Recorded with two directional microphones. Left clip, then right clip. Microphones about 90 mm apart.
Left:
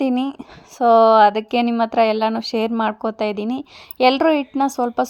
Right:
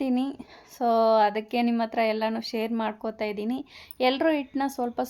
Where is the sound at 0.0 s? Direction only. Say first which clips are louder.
Left 7 dB; 75° left (ahead or behind); by 1.7 s 60° left (ahead or behind).